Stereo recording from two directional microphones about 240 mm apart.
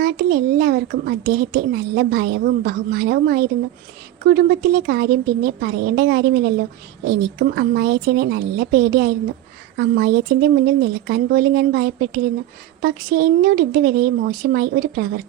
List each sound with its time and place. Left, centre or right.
0.0 s a child's voice: right